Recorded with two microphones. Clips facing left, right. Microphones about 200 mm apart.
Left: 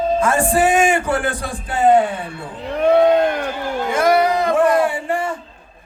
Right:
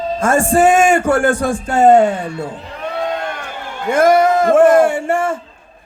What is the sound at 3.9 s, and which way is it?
A man's voice, 45° right (ahead or behind).